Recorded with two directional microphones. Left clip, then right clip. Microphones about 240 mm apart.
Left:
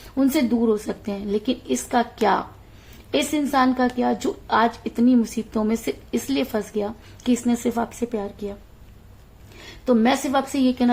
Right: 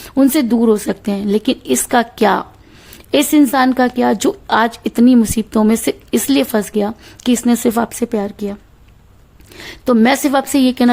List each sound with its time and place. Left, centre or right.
0.1 s a woman's voice: right
9.6 s a woman's voice: right